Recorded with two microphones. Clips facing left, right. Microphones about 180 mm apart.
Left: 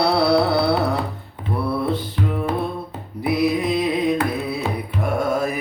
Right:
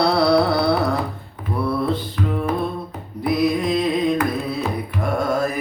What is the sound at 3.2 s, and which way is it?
Carnatic music, 10° left (ahead or behind).